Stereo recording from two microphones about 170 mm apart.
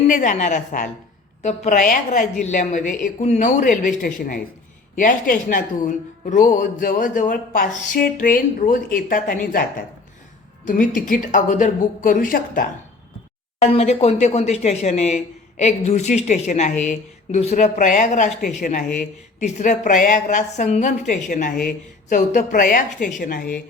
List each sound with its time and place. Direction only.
0.1 s speech: 50° left (ahead or behind)
10.7 s speech: 50° left (ahead or behind)
13.6 s speech: 40° left (ahead or behind); by 23.5 s 55° left (ahead or behind)